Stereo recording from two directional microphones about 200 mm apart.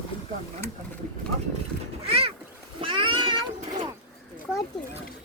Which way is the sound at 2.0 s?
30° right (ahead or behind).